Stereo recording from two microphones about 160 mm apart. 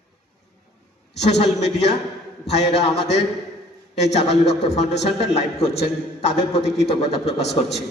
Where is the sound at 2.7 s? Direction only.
40° left (ahead or behind).